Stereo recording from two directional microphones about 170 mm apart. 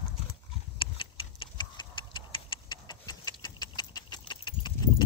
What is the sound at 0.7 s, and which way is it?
Tick-tock, 30° left (ahead or behind).